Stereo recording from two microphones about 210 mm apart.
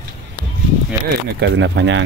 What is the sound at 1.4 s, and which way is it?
Speech, 60° right (ahead or behind).